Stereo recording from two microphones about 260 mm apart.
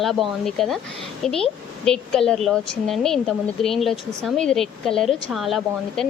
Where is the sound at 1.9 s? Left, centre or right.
Centre.